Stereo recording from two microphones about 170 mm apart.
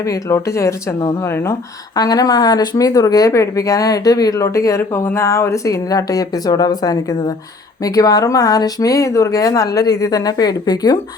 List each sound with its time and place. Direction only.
0.0 s speech: 20° left (ahead or behind)